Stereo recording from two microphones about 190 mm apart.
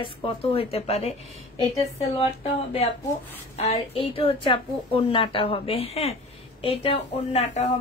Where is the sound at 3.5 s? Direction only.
30° left (ahead or behind).